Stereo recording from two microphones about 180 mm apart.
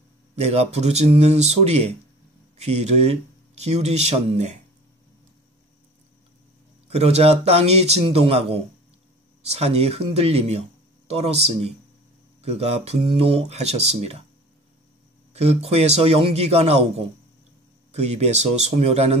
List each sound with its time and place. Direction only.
0.4 s speech: 35° right (ahead or behind)
6.9 s speech: 35° right (ahead or behind)
15.3 s speech: 35° right (ahead or behind)